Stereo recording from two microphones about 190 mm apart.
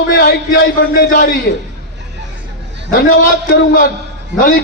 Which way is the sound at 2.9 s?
50° left (ahead or behind).